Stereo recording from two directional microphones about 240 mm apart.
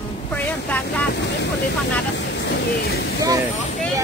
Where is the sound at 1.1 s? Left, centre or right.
Left.